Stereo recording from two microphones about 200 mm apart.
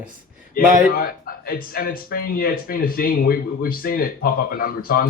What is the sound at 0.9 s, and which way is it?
Speech, 45° left (ahead or behind).